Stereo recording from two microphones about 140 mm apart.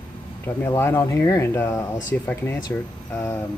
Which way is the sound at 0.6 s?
15° left (ahead or behind).